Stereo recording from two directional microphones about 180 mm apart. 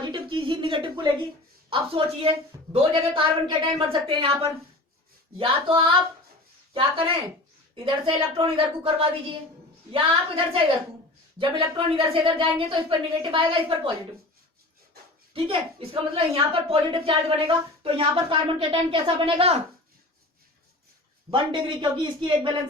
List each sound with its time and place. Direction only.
0.0 s a woman's voice: 25° right (ahead or behind)
15.3 s a woman's voice: 30° right (ahead or behind)
21.2 s a woman's voice: 25° right (ahead or behind)